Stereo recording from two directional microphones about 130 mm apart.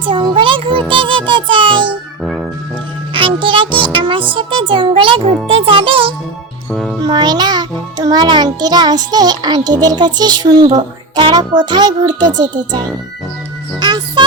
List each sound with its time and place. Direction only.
0.0 s music: 40° right (ahead or behind)
2.2 s music: centre (ahead or behind)
3.1 s music: 40° right (ahead or behind)
5.5 s a child's voice: 45° right (ahead or behind)
6.7 s music: 5° left (ahead or behind)
7.0 s music: 35° right (ahead or behind)